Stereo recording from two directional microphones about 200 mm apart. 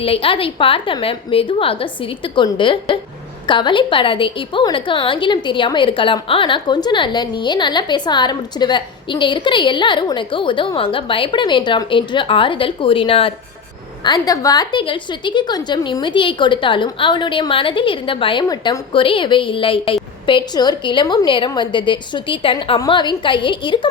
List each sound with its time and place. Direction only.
0.0 s a woman's voice: 30° left (ahead or behind)